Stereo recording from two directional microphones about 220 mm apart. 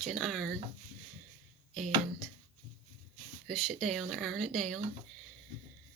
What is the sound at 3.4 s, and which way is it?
Speech, centre (ahead or behind).